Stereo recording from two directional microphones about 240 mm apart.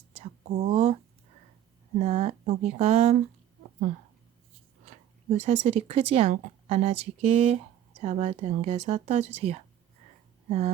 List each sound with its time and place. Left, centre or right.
0.2 s speech: right
2.0 s speech: right
4.9 s speech: right